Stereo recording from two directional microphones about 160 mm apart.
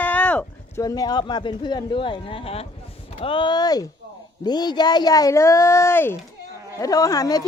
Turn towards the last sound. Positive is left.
turn(degrees=20)  # may be behind; listen again after turning